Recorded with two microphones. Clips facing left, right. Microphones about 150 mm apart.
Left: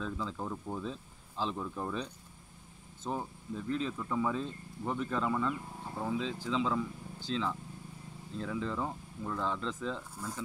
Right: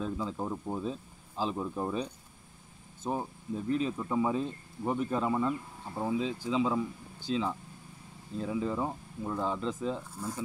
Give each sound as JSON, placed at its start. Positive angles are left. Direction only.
{"t": 0.0, "sound": "speech", "side_deg": -15}